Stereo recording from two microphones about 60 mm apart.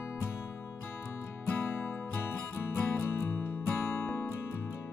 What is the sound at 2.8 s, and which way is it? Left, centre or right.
Music, left.